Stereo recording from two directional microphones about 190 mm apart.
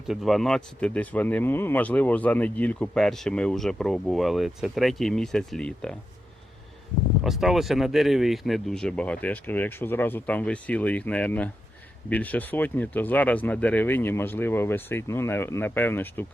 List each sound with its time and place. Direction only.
0.1 s speech: centre (ahead or behind)
7.3 s speech: centre (ahead or behind)